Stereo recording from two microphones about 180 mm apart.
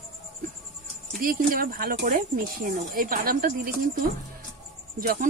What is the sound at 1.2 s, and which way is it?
Speech, 50° right (ahead or behind).